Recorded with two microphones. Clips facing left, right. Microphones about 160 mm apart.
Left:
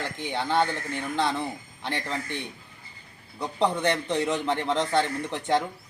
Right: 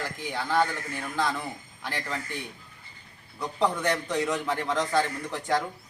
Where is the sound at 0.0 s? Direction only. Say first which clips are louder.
Left 2 dB; 25° left (ahead or behind).